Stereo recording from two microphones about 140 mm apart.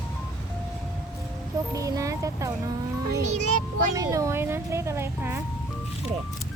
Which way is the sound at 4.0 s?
25° right (ahead or behind).